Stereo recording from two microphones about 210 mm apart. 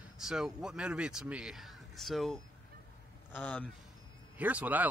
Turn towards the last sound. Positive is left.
turn(degrees=-10)  # may be behind; listen again after turning